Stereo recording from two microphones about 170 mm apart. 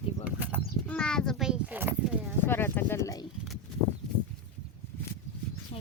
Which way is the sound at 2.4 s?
15° left (ahead or behind).